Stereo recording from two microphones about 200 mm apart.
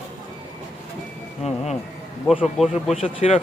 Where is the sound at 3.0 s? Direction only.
30° left (ahead or behind).